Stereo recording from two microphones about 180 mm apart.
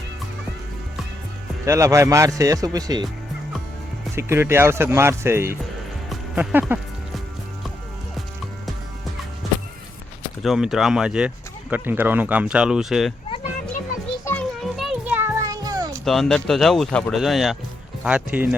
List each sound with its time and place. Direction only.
1.6 s speech: 15° right (ahead or behind)
4.1 s speech: 15° right (ahead or behind)
6.1 s music: 5° right (ahead or behind)
10.4 s speech: centre (ahead or behind)
14.3 s music: 5° left (ahead or behind); by 16.0 s 20° right (ahead or behind)
16.0 s speech: centre (ahead or behind)